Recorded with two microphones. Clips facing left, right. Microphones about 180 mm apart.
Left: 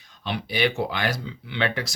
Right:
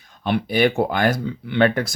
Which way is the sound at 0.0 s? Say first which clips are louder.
Right 8 dB; 55° right (ahead or behind).